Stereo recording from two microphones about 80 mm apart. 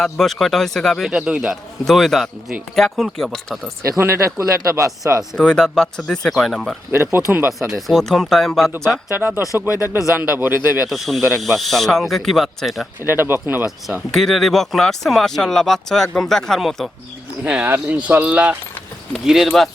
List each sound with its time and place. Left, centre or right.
0.0 s speech: centre
1.1 s speech: centre
1.8 s speech: centre
3.9 s speech: right
5.4 s speech: centre
6.9 s speech: right
7.7 s speech: centre
9.1 s speech: right
9.6 s speech: left
10.3 s speech: right
10.8 s speech: centre
13.1 s speech: right
14.1 s speech: centre
17.4 s speech: centre